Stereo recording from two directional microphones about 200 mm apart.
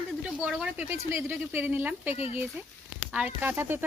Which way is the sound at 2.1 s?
30° left (ahead or behind).